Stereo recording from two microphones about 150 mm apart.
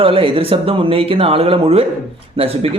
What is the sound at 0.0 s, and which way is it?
Speech, 40° right (ahead or behind).